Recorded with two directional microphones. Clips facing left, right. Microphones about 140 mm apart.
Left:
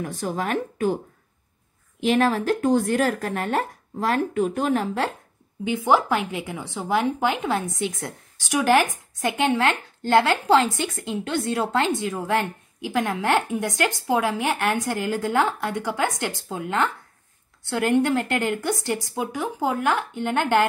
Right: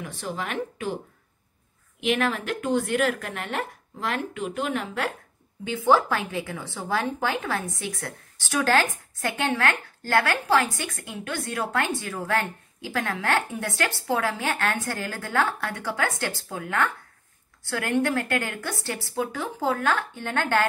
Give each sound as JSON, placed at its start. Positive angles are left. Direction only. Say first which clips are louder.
{"t": 0.0, "sound": "speech", "louder": "left 5 dB", "side_deg": 45}
{"t": 2.0, "sound": "speech", "louder": "left 5 dB", "side_deg": 35}
{"t": 5.7, "sound": "a woman's voice", "louder": "left 1 dB", "side_deg": 15}